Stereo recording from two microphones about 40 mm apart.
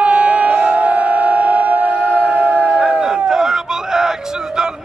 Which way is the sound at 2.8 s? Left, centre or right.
Right.